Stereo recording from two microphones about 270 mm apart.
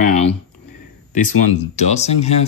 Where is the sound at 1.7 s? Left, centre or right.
Left.